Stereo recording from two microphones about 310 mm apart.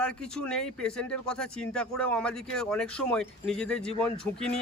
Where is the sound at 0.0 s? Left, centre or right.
Centre.